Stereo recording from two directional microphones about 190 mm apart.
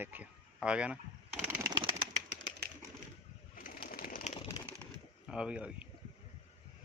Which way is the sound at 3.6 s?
50° left (ahead or behind).